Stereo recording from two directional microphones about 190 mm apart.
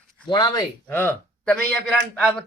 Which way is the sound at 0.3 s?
20° left (ahead or behind).